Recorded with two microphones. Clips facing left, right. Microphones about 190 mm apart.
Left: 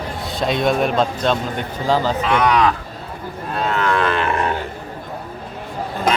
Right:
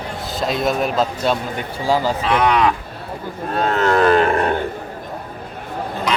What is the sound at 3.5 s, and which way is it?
Livestock, 40° right (ahead or behind).